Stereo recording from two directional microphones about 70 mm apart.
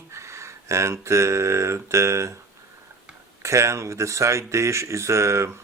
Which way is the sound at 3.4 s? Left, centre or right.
Right.